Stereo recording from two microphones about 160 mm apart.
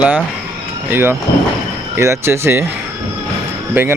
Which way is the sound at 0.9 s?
15° right (ahead or behind).